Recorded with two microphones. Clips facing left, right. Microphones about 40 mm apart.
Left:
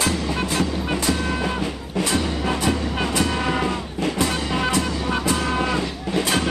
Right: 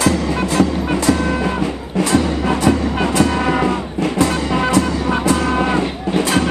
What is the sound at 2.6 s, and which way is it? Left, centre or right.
Music, right.